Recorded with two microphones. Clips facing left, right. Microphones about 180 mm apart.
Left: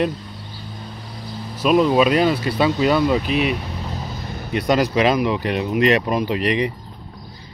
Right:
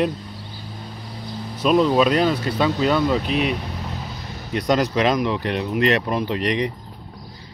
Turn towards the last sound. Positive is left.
turn(degrees=5)  # may be behind; listen again after turning